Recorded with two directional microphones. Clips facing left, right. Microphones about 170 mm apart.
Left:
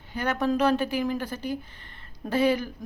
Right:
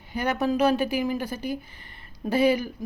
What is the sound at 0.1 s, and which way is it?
Speech, 10° right (ahead or behind).